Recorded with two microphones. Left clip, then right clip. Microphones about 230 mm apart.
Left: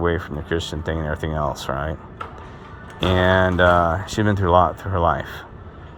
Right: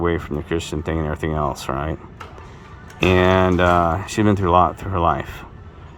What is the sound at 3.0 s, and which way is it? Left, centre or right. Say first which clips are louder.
Speech: right 2 dB; centre.